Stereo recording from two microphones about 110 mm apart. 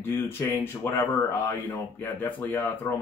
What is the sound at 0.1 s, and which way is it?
Speech, 25° left (ahead or behind).